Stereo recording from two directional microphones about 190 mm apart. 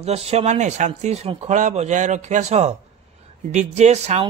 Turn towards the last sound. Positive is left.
turn(degrees=-35)  # may be behind; listen again after turning